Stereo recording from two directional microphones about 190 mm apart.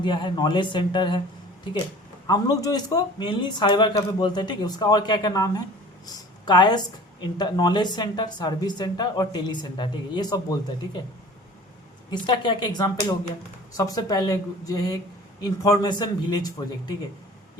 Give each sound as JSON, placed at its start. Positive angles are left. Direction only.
{"t": 0.0, "sound": "speech", "side_deg": 25}
{"t": 2.2, "sound": "speech", "side_deg": 20}
{"t": 12.2, "sound": "speech", "side_deg": 25}